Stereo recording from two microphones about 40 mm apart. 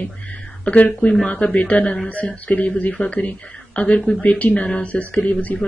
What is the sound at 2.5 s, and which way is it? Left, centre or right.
Speech, left.